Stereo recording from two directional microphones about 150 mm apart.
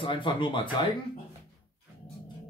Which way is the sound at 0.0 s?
30° left (ahead or behind).